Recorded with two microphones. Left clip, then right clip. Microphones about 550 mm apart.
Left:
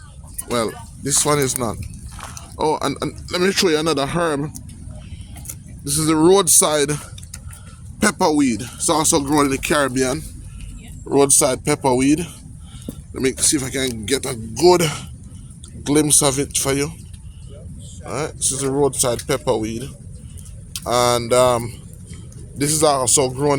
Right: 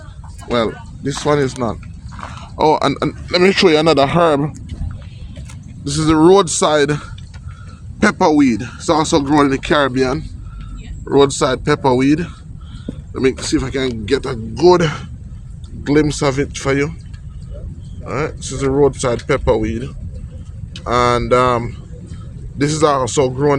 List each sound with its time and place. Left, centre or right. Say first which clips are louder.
0.4 s speech: right 4 dB; left
2.6 s speech: right 6 dB; left
5.8 s speech: right 4 dB; left
18.1 s speech: right 3 dB; left